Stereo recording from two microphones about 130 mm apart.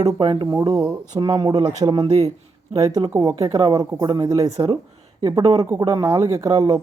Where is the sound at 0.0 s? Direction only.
40° right (ahead or behind).